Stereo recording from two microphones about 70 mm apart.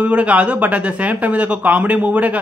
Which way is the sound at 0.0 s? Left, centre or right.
Centre.